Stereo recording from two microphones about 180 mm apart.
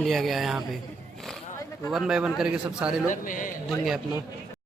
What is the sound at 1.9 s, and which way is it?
Speech, 5° right (ahead or behind).